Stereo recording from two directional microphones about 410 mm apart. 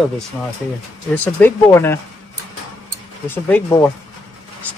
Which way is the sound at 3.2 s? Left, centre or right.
Centre.